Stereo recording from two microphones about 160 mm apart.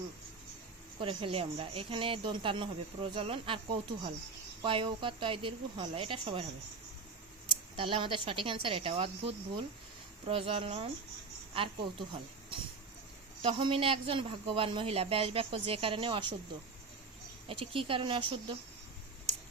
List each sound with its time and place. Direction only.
0.9 s speech: 35° right (ahead or behind)
7.8 s speech: 35° right (ahead or behind)
17.5 s speech: 35° right (ahead or behind)